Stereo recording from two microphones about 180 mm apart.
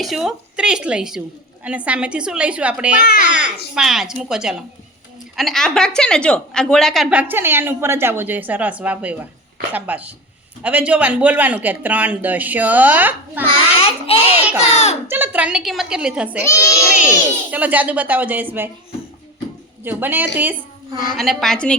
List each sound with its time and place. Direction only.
0.0 s a woman's voice: centre (ahead or behind)
3.1 s a child's voice: 45° left (ahead or behind)
3.8 s a woman's voice: centre (ahead or behind)
13.7 s a sound: 30° left (ahead or behind)
14.6 s speech: 35° left (ahead or behind)
15.0 s a woman's voice: 10° right (ahead or behind)
16.4 s a child's voice: 15° left (ahead or behind)
17.5 s a woman's voice: 10° right (ahead or behind)
19.8 s a woman's voice: 10° right (ahead or behind)
21.2 s speech: centre (ahead or behind)